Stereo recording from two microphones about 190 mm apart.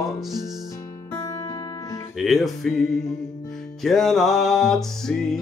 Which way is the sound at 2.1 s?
Centre (ahead or behind).